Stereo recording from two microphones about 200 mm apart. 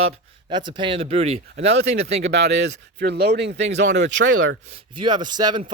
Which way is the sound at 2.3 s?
55° right (ahead or behind).